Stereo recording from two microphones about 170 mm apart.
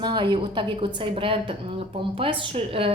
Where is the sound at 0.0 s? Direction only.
25° right (ahead or behind).